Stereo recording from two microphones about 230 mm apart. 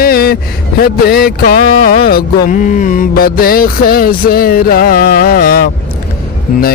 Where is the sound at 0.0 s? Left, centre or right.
Left.